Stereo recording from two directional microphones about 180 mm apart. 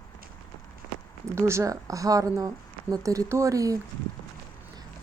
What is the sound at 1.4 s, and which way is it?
Speech, 15° right (ahead or behind).